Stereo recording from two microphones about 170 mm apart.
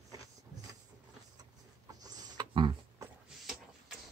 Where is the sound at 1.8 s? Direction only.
25° right (ahead or behind).